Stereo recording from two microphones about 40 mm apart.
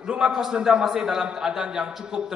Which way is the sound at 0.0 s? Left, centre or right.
Right.